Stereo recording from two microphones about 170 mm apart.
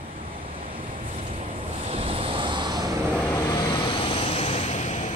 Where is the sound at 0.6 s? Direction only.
35° right (ahead or behind).